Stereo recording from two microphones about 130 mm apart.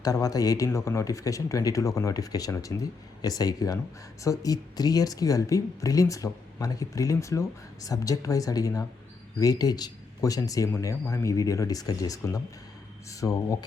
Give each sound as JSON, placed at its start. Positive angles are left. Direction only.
{"t": 0.0, "sound": "speech", "side_deg": 25}